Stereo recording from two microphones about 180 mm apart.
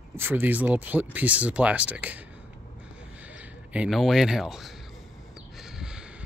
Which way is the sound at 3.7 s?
5° right (ahead or behind).